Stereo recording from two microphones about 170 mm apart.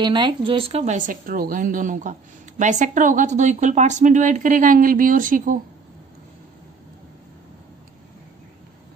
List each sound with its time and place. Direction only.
0.0 s a woman's voice: 30° right (ahead or behind); by 5.6 s 55° right (ahead or behind)